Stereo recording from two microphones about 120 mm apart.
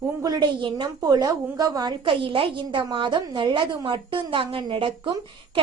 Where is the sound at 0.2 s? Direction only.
35° right (ahead or behind).